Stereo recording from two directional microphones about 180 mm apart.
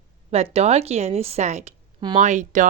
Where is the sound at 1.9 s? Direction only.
25° right (ahead or behind).